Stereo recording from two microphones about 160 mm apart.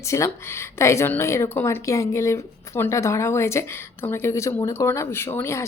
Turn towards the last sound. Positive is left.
turn(degrees=15)  # may be behind; listen again after turning